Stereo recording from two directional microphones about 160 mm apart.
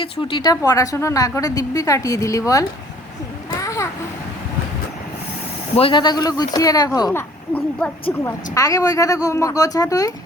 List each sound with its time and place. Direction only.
0.0 s a woman's voice: 30° left (ahead or behind)
3.6 s a sound: 20° left (ahead or behind)
5.7 s a woman's voice: 35° left (ahead or behind)